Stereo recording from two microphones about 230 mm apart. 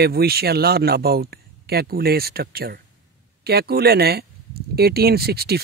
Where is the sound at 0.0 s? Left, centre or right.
Right.